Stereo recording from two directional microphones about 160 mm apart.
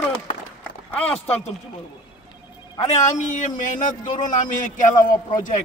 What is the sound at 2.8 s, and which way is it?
A man's voice, 50° left (ahead or behind).